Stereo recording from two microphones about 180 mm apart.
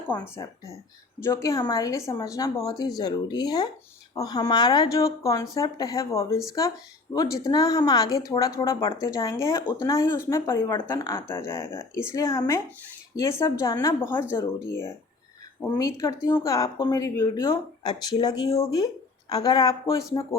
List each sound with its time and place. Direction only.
0.1 s speech: 15° left (ahead or behind)